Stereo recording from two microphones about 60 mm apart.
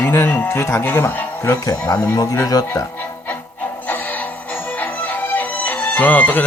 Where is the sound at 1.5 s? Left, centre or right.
Left.